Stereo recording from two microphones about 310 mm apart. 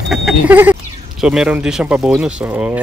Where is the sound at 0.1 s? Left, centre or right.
Centre.